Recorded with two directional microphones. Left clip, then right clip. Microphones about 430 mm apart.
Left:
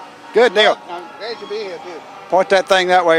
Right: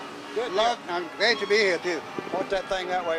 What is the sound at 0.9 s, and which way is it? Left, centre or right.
Speech, centre.